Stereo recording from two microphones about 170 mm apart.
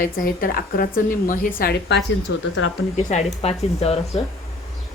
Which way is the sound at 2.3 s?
90° left.